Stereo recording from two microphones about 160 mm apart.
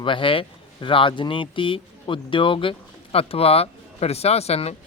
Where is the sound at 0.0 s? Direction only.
30° left (ahead or behind).